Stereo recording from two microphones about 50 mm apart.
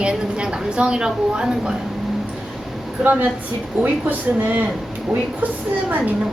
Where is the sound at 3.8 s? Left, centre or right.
Right.